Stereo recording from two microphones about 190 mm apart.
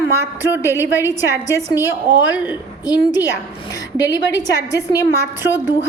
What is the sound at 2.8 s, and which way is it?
A woman's voice, 20° left (ahead or behind).